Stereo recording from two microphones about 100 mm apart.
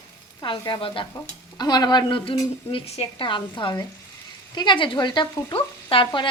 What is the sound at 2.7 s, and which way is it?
Speech, 75° left (ahead or behind).